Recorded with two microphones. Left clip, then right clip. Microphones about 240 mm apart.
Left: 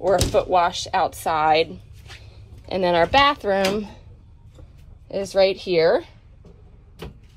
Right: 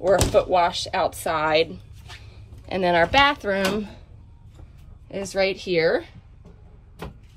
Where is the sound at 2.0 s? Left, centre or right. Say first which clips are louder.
Even; centre.